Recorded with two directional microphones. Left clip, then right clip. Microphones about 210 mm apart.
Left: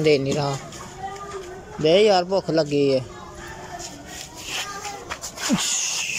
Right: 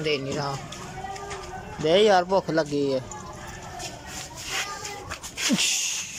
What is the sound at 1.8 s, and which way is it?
Speech, 5° left (ahead or behind).